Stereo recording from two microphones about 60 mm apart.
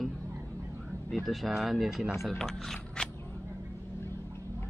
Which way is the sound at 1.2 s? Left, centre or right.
Centre.